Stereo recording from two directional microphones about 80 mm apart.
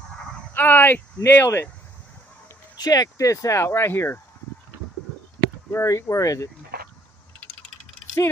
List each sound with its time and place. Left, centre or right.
0.6 s speech: left
2.8 s speech: left
5.7 s speech: left